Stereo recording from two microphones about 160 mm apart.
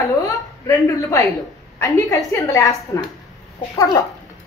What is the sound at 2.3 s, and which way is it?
Speech, 20° left (ahead or behind).